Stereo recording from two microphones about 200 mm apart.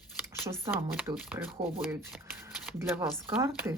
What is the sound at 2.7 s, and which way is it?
Speech, 10° right (ahead or behind).